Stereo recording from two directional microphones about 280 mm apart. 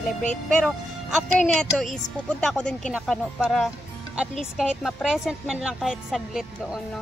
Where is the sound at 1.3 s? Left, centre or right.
Centre.